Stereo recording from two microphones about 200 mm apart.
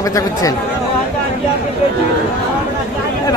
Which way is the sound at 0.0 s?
15° left (ahead or behind).